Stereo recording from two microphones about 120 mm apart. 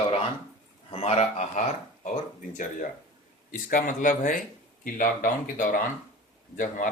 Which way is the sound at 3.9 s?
90° left.